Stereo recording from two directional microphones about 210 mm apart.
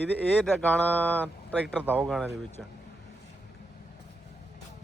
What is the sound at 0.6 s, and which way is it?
A man's voice, 10° left (ahead or behind).